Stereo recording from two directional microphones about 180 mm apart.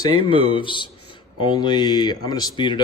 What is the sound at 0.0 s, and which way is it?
A man's voice, 30° left (ahead or behind).